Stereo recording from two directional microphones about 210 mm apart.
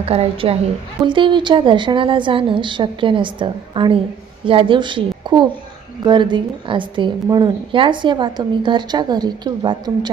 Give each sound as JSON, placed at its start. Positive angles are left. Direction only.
{"t": 0.0, "sound": "a woman's voice", "side_deg": -30}